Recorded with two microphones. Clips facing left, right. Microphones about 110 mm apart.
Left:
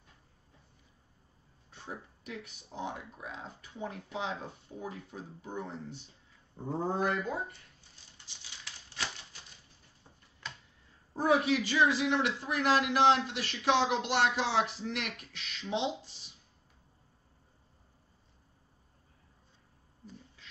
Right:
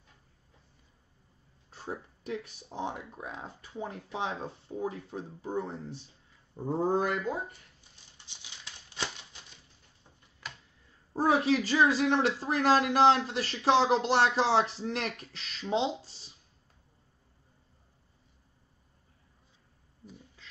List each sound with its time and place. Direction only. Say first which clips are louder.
1.7 s speech: right 5 dB; 30° right (ahead or behind)
6.6 s speech: right 5 dB; 5° right (ahead or behind)
8.3 s a sound: even; 20° right (ahead or behind)
11.1 s speech: right 2 dB; 35° right (ahead or behind)